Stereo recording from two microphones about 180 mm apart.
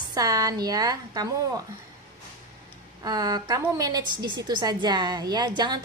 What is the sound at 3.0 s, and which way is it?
A woman's voice, 20° right (ahead or behind).